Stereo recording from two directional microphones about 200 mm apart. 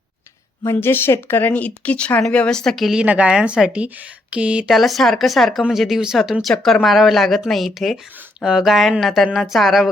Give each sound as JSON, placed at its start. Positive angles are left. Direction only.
{"t": 0.6, "sound": "speech", "side_deg": 10}